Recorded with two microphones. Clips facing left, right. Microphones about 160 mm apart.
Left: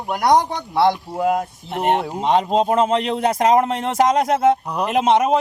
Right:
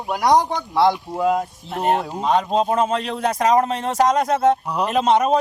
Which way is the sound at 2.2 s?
25° left (ahead or behind).